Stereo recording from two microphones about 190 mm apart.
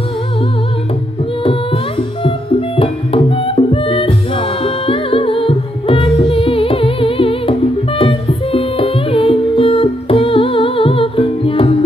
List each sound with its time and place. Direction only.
1.4 s music: 30° left (ahead or behind)